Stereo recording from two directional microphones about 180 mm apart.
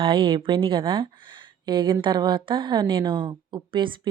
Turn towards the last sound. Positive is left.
turn(degrees=-25)  # may be behind; listen again after turning